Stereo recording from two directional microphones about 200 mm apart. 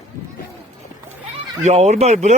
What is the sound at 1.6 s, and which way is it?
Speech, 35° right (ahead or behind).